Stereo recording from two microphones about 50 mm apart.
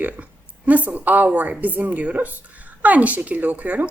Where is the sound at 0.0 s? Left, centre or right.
Right.